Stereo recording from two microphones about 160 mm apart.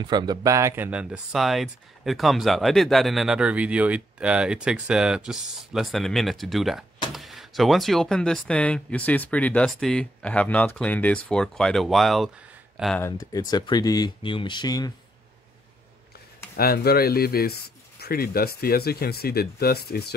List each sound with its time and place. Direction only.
0.0 s speech: 25° right (ahead or behind); by 13.0 s centre (ahead or behind)
13.0 s speech: 20° left (ahead or behind)
16.5 s speech: 75° left (ahead or behind)